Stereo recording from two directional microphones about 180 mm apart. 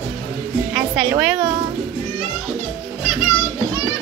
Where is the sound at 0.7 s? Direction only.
5° right (ahead or behind).